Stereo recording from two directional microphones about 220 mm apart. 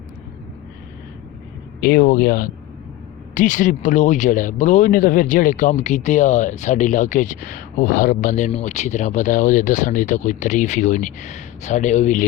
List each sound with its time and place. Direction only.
1.8 s speech: 45° left (ahead or behind)